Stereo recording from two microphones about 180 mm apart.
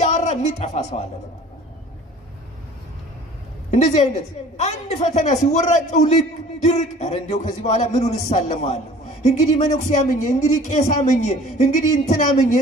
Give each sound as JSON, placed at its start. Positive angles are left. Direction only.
{"t": 0.0, "sound": "a woman's voice", "side_deg": 40}
{"t": 3.7, "sound": "speech", "side_deg": 40}